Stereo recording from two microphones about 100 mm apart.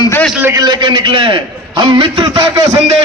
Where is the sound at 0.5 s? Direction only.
50° right (ahead or behind).